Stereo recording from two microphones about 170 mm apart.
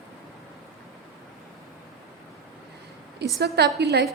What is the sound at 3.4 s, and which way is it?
Speech, 75° right (ahead or behind).